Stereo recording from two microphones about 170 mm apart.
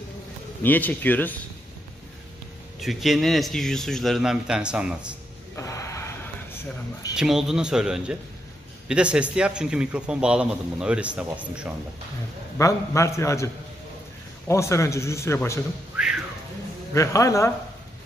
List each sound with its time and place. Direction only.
0.6 s speech: 10° left (ahead or behind)
2.8 s a man's voice: centre (ahead or behind)
5.6 s a sound: 20° left (ahead or behind)
6.5 s speech: 20° left (ahead or behind)
7.2 s a man's voice: 5° right (ahead or behind)
12.5 s speech: 20° left (ahead or behind)
14.5 s speech: 15° left (ahead or behind)
16.9 s speech: 20° left (ahead or behind)